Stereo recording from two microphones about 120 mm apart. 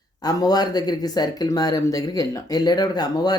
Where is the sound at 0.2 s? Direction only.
35° left (ahead or behind).